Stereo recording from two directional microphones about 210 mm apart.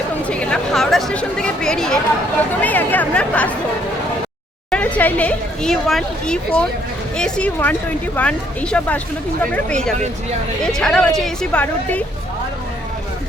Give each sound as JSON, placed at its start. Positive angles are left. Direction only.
{"t": 0.3, "sound": "speech", "side_deg": 5}
{"t": 4.7, "sound": "speech", "side_deg": 5}